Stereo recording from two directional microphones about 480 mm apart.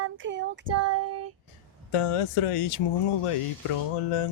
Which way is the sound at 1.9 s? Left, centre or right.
Left.